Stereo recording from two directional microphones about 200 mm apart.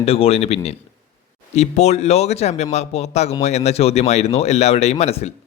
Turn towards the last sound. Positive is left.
turn(degrees=30)  # may be behind; listen again after turning